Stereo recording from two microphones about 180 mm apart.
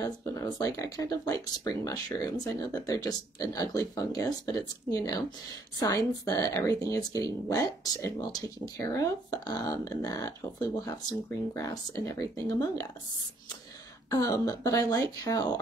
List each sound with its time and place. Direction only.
0.0 s speech: 20° left (ahead or behind)
14.1 s speech: 20° left (ahead or behind)